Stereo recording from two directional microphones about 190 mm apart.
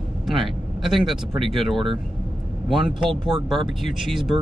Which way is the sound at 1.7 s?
30° right (ahead or behind).